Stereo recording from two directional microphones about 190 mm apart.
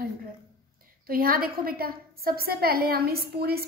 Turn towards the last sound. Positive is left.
turn(degrees=-55)  # may be behind; listen again after turning